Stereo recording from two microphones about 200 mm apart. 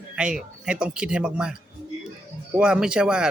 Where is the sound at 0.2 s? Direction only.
5° right (ahead or behind).